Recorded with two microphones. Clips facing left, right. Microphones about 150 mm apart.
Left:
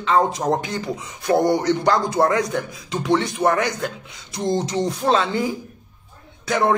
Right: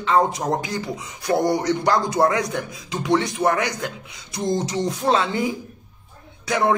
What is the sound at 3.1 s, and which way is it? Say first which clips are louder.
Speech: even; 25° left (ahead or behind).